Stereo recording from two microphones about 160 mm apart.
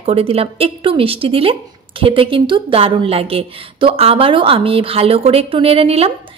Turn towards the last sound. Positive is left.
turn(degrees=-35)  # may be behind; listen again after turning